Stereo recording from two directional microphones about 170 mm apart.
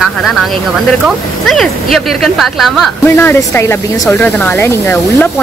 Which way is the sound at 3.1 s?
15° left (ahead or behind).